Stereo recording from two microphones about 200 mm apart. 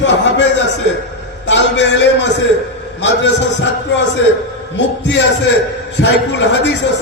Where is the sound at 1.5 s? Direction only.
60° left (ahead or behind).